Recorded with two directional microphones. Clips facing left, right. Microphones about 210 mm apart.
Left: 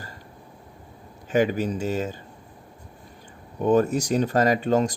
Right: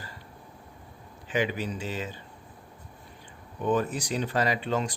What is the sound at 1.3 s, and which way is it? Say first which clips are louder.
Speech: left 7 dB; 45° left (ahead or behind).